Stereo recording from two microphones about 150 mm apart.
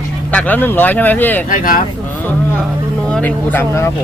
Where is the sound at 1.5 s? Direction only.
65° left (ahead or behind).